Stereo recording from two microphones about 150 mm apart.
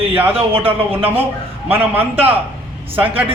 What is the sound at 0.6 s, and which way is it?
A man's voice, 15° right (ahead or behind).